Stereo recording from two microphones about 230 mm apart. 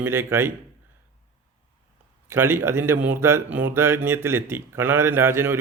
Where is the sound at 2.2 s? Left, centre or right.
Centre.